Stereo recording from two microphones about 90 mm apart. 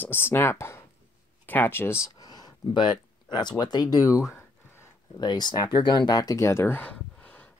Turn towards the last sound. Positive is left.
turn(degrees=15)  # may be behind; listen again after turning